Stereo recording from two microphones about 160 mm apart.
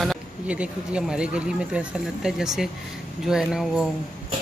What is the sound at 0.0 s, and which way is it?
Speech, 5° right (ahead or behind).